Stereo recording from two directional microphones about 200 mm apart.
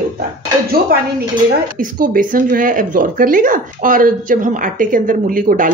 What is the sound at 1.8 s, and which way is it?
Speech, 45° right (ahead or behind).